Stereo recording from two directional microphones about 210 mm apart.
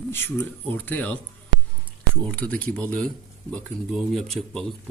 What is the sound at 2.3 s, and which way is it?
Speech, 5° left (ahead or behind).